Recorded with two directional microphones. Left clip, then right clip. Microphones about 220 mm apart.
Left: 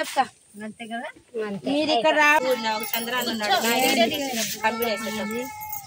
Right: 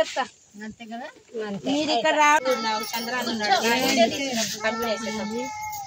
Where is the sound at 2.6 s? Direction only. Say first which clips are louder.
Even; 10° right (ahead or behind).